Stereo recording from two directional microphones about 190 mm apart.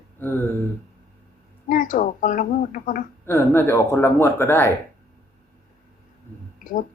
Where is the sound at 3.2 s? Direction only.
10° left (ahead or behind).